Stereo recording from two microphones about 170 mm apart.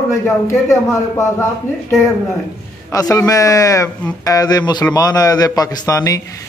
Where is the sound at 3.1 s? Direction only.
20° left (ahead or behind).